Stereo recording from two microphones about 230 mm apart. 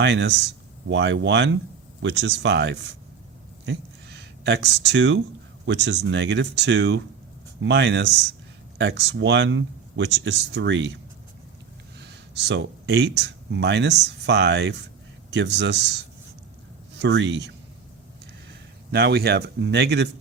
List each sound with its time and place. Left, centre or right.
0.0 s speech: right
3.7 s a sound: right
5.6 s speech: right
17.0 s speech: right
18.9 s speech: right